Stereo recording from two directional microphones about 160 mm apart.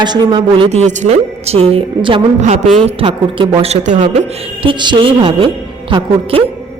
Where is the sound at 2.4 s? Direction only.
45° right (ahead or behind).